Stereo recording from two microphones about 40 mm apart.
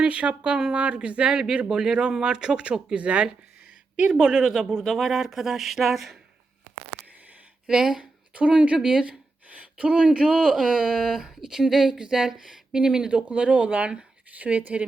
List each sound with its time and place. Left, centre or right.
0.0 s speech: right
4.2 s speech: right; by 6.1 s centre
7.7 s speech: centre
8.3 s speech: right
13.2 s speech: right